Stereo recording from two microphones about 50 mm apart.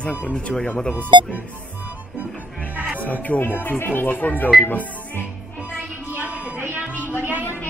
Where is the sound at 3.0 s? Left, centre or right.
Left.